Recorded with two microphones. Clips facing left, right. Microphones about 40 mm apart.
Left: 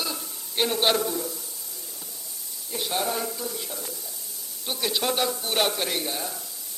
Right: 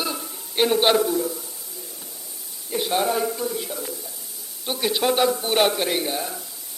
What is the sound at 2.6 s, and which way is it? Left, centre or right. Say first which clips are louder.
A man's voice: right 6 dB; centre.